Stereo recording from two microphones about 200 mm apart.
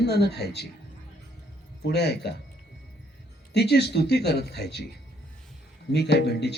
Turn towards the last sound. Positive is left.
turn(degrees=55)  # may be behind; listen again after turning